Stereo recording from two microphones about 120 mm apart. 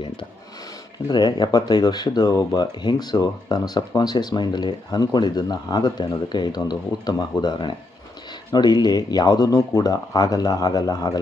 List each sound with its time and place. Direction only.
1.0 s speech: 35° left (ahead or behind)